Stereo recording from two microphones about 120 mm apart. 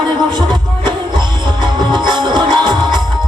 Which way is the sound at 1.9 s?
40° right (ahead or behind).